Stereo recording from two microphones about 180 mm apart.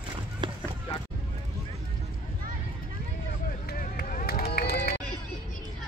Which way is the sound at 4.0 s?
50° left (ahead or behind).